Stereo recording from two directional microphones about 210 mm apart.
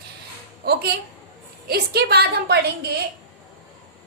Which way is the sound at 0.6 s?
50° right (ahead or behind).